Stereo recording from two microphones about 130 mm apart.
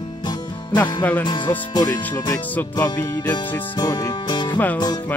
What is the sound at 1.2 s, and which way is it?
Speech, 35° left (ahead or behind).